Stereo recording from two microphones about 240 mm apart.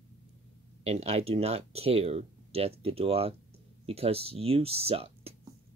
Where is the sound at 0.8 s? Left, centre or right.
Right.